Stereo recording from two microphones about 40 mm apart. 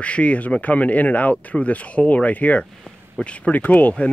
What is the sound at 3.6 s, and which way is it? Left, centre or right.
Speech, left.